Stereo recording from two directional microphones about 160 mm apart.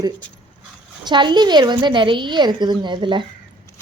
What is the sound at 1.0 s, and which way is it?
A woman's voice, 30° right (ahead or behind).